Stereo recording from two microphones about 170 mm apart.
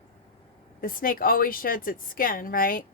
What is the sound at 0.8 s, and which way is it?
A woman's voice, 55° left (ahead or behind).